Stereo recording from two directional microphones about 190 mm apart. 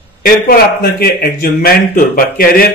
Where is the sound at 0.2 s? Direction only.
50° left (ahead or behind).